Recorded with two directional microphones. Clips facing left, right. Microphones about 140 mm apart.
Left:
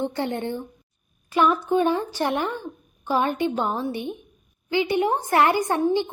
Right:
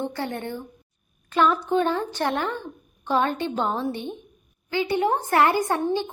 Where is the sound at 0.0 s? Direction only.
20° left (ahead or behind).